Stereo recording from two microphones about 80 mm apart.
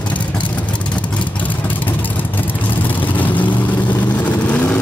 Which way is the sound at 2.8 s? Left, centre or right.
Left.